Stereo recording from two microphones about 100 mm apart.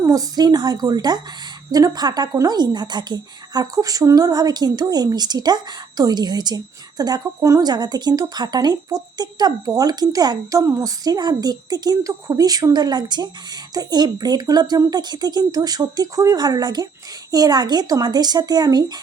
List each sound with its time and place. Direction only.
0.0 s speech: 35° right (ahead or behind)